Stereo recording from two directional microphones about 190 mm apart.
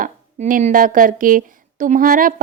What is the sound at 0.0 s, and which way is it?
A woman's voice, 45° right (ahead or behind).